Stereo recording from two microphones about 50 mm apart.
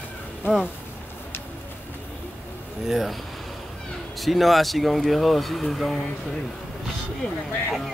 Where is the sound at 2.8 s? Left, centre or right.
Centre.